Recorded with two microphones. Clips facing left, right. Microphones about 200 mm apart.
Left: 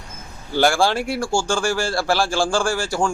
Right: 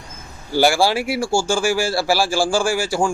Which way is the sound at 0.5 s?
10° right (ahead or behind).